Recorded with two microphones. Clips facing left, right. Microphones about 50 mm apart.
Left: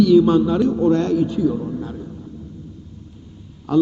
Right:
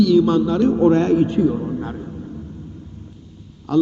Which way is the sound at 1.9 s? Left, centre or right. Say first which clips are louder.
Right 2 dB; right.